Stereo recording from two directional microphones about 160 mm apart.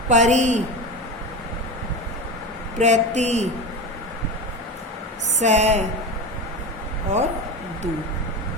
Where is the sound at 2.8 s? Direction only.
45° right (ahead or behind).